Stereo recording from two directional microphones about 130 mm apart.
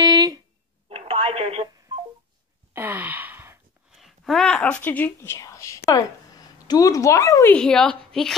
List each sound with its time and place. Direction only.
0.0 s a sound: 30° right (ahead or behind)
0.8 s telephone: 50° right (ahead or behind)
2.7 s gasp: 15° right (ahead or behind)
3.9 s speech: centre (ahead or behind); by 7.5 s 25° left (ahead or behind)
7.5 s a woman's voice: 5° left (ahead or behind)